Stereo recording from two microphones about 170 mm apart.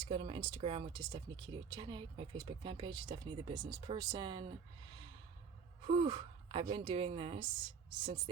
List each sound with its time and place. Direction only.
0.0 s speech: 30° right (ahead or behind)
5.9 s a woman's voice: 35° right (ahead or behind)